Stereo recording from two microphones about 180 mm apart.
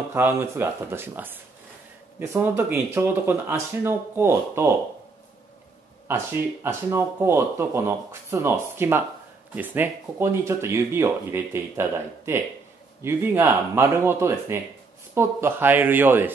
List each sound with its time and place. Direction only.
0.1 s speech: 15° right (ahead or behind)
6.0 s speech: 15° right (ahead or behind)